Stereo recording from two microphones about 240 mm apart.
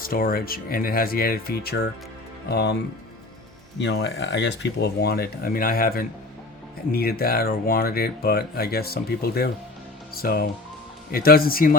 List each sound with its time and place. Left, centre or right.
0.0 s speech: left
3.8 s speech: left